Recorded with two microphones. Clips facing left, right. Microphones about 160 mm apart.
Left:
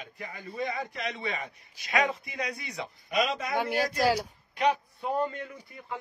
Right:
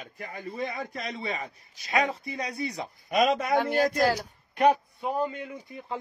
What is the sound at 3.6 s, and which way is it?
Speech, 10° left (ahead or behind).